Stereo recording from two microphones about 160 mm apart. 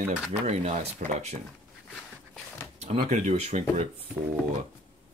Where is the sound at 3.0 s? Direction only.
45° right (ahead or behind).